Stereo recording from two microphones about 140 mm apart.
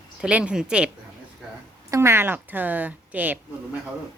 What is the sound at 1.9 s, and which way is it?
A woman's voice, 20° right (ahead or behind).